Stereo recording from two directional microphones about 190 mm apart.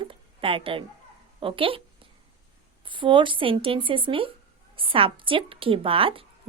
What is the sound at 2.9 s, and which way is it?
A woman's voice, 25° right (ahead or behind).